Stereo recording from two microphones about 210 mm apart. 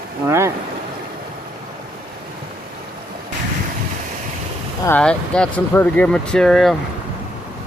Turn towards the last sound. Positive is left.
turn(degrees=0)  # may be behind; listen again after turning